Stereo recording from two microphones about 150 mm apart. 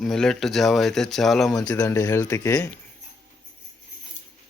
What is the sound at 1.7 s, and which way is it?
Speech, 20° left (ahead or behind).